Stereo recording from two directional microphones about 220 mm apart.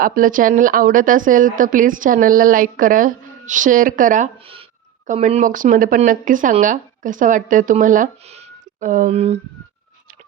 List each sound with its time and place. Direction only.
0.0 s speech: 40° right (ahead or behind)